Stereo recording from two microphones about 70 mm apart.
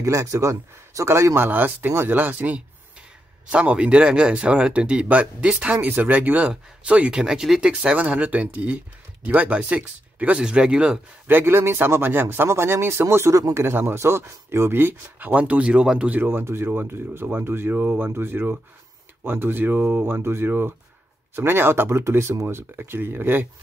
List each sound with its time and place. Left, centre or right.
0.0 s speech: right; by 7.7 s centre
7.8 s speech: centre
11.2 s speech: right; by 16.2 s centre
16.2 s speech: right